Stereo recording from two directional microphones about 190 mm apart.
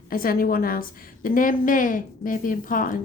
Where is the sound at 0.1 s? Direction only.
50° left (ahead or behind).